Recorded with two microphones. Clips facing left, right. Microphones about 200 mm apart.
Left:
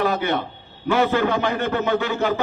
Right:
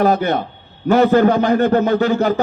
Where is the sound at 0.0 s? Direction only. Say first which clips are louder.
Right 6 dB; 45° right (ahead or behind).